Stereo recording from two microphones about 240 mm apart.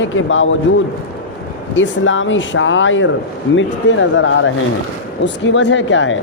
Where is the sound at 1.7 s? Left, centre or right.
Left.